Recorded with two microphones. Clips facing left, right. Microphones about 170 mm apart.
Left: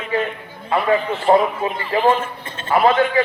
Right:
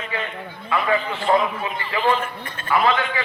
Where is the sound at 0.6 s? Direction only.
40° left (ahead or behind).